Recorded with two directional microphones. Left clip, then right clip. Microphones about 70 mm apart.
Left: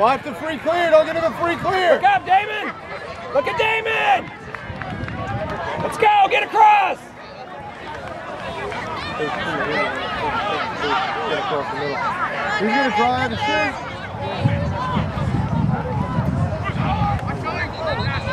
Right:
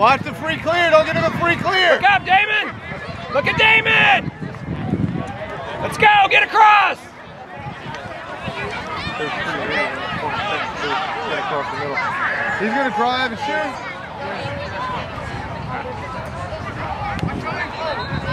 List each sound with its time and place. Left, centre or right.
0.0 s a man's voice: centre
5.9 s speech: right
8.9 s a sound: centre
11.9 s a man's voice: right
12.7 s a man's voice: left
13.0 s a man's voice: right
17.3 s boat: centre